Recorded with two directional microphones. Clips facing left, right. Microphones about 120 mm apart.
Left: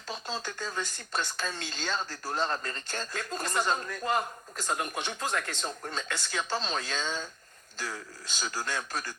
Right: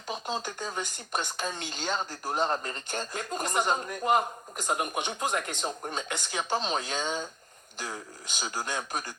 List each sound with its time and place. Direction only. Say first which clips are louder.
0.1 s speech: right 3 dB; 15° right (ahead or behind)